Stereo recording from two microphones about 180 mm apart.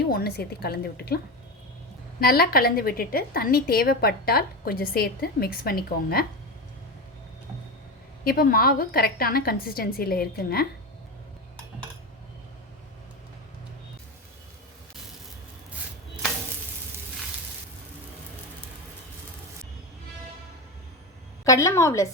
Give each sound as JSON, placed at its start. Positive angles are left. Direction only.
{"t": 0.1, "sound": "a woman's voice", "side_deg": 60}
{"t": 2.2, "sound": "a woman's voice", "side_deg": 55}
{"t": 8.2, "sound": "a woman's voice", "side_deg": 55}
{"t": 21.4, "sound": "a woman's voice", "side_deg": 15}